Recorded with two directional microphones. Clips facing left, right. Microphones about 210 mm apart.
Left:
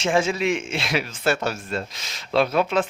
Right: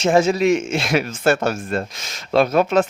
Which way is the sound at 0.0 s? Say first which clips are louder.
Right 6 dB; 40° right (ahead or behind).